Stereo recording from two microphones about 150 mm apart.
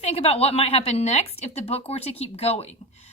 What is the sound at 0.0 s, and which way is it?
A woman's voice, 45° left (ahead or behind).